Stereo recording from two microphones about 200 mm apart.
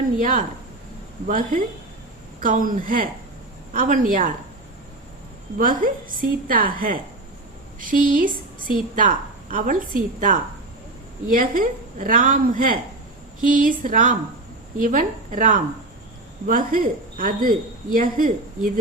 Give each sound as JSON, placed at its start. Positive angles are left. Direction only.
{"t": 0.2, "sound": "a woman's voice", "side_deg": -40}
{"t": 5.5, "sound": "a woman's voice", "side_deg": -45}